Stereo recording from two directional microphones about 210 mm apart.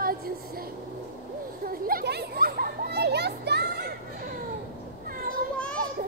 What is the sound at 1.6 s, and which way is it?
Children playing, 45° right (ahead or behind).